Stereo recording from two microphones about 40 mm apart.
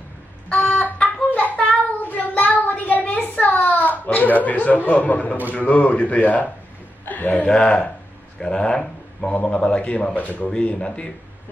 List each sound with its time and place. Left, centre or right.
0.5 s a sound: left
1.3 s child singing: left
2.0 s child singing: left
2.3 s a sound: left
3.3 s a child's voice: left
7.4 s speech: left
9.3 s a man's voice: left
10.1 s speech: left
10.8 s speech: left